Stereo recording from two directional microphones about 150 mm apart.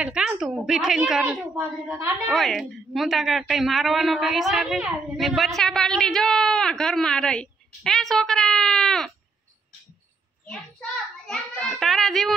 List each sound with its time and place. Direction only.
0.0 s a woman's voice: 5° right (ahead or behind)
1.6 s a woman's voice: 20° right (ahead or behind)
2.2 s a woman's voice: centre (ahead or behind)
10.4 s a child's voice: 5° left (ahead or behind)